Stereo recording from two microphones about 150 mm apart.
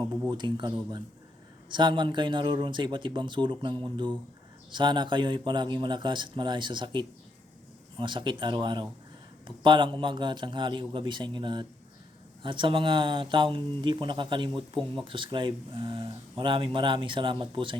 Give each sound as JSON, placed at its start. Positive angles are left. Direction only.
{"t": 0.3, "sound": "speech", "side_deg": -30}